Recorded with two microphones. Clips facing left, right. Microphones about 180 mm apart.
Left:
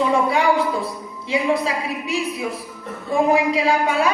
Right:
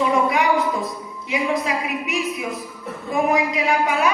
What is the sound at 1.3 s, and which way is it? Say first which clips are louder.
A woman's voice: left 2 dB; 30° left (ahead or behind).